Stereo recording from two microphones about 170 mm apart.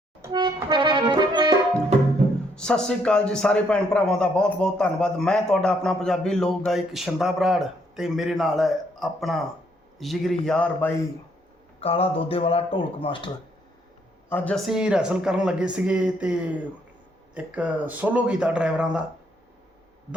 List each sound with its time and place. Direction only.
0.2 s music: 25° right (ahead or behind)
2.6 s a man's voice: 5° left (ahead or behind)
11.8 s speech: 35° left (ahead or behind)
14.3 s speech: 10° left (ahead or behind)
14.7 s a man's voice: 5° right (ahead or behind)